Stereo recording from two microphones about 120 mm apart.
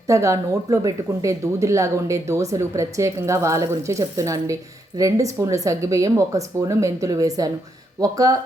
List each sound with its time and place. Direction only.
0.1 s speech: 25° right (ahead or behind)